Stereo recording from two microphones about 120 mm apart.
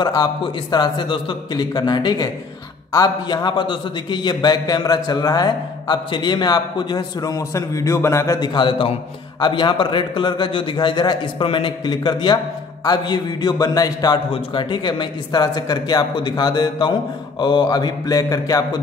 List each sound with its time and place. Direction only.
0.0 s a man's voice: 35° left (ahead or behind)
8.4 s a man's voice: 45° left (ahead or behind)
14.3 s a man's voice: 45° left (ahead or behind)